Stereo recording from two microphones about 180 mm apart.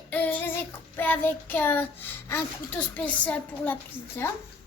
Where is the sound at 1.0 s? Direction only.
10° left (ahead or behind).